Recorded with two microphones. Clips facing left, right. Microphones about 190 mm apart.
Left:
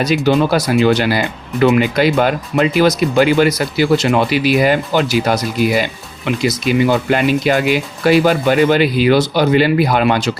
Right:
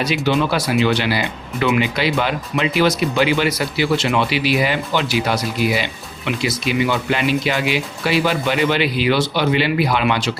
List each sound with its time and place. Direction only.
0.0 s speech: 45° left (ahead or behind)